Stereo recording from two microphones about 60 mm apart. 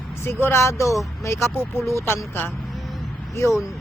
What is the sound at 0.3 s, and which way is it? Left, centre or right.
Speech, left.